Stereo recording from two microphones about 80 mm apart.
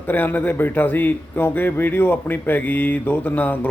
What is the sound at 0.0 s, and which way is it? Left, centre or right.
A man's voice, left.